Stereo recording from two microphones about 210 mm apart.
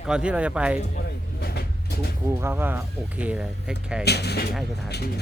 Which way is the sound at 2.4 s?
10° right (ahead or behind).